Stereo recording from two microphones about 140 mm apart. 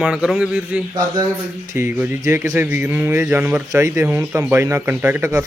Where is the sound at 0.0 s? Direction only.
5° right (ahead or behind).